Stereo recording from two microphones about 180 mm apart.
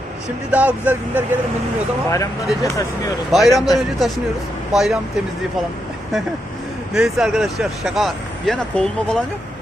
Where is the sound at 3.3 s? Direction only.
Centre (ahead or behind).